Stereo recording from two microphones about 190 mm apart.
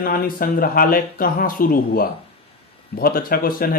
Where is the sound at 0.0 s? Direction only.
50° left (ahead or behind).